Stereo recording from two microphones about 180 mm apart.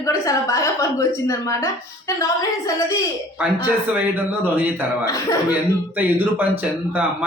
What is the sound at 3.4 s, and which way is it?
A man's voice, 10° right (ahead or behind).